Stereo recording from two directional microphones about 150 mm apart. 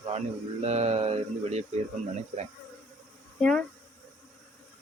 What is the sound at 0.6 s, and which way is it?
Speech, 45° right (ahead or behind).